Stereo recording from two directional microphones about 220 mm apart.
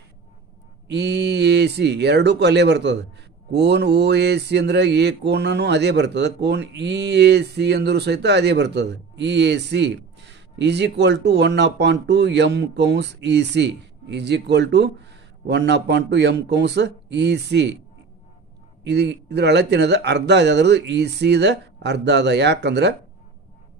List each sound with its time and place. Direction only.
0.8 s mantra: 50° right (ahead or behind)
18.9 s mantra: 50° right (ahead or behind)